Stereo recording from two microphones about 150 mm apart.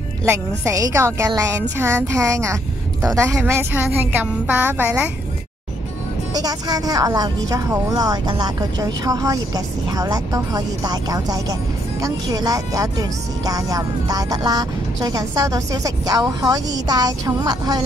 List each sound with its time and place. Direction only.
0.2 s a woman's voice: 20° right (ahead or behind)
6.3 s speech: 25° right (ahead or behind)